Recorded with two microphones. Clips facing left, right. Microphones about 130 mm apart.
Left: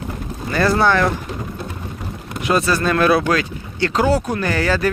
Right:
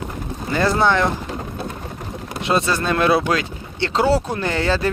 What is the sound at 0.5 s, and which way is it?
Speech, 20° right (ahead or behind).